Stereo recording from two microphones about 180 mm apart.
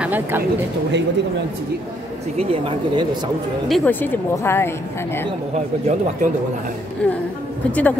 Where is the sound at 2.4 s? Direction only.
30° right (ahead or behind).